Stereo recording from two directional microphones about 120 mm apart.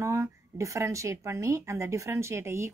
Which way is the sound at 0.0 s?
25° right (ahead or behind).